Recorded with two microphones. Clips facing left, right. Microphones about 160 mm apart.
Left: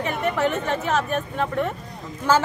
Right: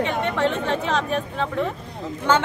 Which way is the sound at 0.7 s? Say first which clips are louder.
Even; 5° left (ahead or behind).